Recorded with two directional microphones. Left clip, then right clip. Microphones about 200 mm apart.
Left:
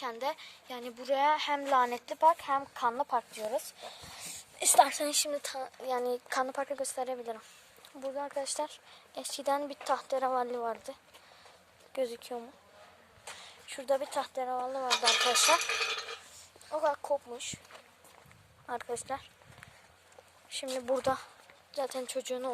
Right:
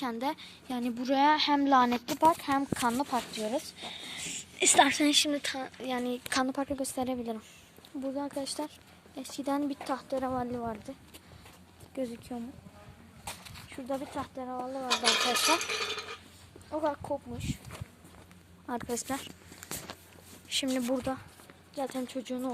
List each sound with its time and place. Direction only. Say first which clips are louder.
0.0 s a woman's voice: right 2 dB; 10° right (ahead or behind)
2.9 s a woman's voice: even; centre (ahead or behind)
7.9 s speech: right 1 dB; 10° left (ahead or behind)
8.4 s speech: left 1 dB; 35° left (ahead or behind)
11.9 s speech: left 3 dB; 40° left (ahead or behind)
13.7 s speech: left 5 dB; 50° left (ahead or behind)
15.0 s speech: even; centre (ahead or behind)
16.7 s speech: left 2 dB; 20° left (ahead or behind)
17.3 s speech: even; 50° left (ahead or behind)
18.6 s speech: right 2 dB; centre (ahead or behind)
21.0 s speech: left 4 dB; 55° left (ahead or behind)
21.8 s speech: left 1 dB; 25° left (ahead or behind)